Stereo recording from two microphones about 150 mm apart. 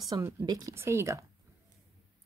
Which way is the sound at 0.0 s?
25° right (ahead or behind).